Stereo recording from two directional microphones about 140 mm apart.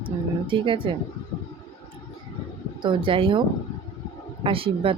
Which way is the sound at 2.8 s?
40° right (ahead or behind).